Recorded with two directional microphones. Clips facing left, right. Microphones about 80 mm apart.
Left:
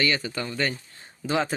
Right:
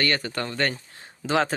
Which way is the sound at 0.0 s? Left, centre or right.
Right.